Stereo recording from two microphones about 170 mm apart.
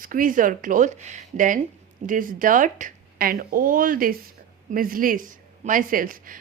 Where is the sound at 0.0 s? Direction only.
55° right (ahead or behind).